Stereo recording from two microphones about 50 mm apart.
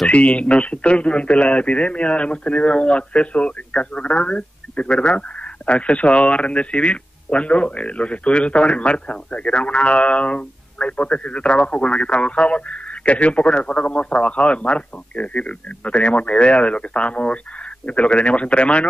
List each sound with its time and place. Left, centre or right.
0.1 s speech: left